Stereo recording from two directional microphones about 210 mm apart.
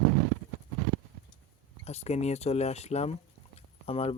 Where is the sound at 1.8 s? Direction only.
30° left (ahead or behind).